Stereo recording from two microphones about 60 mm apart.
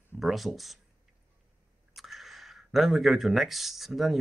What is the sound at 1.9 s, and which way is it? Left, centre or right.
Speech, centre.